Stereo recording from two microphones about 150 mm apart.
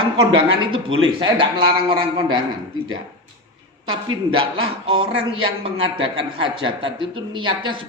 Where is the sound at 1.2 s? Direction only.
35° right (ahead or behind).